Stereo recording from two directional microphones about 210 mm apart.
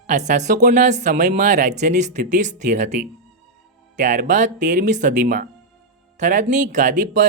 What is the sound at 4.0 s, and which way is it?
Speech, 35° right (ahead or behind).